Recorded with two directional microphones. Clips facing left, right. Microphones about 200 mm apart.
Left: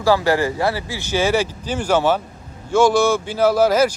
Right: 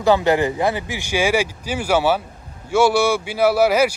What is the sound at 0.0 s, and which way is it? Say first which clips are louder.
Speech: right 1 dB; 20° right (ahead or behind).